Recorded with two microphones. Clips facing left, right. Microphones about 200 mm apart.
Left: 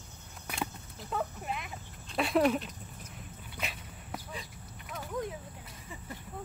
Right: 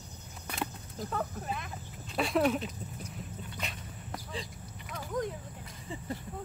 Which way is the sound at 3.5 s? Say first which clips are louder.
Even; 5° left (ahead or behind).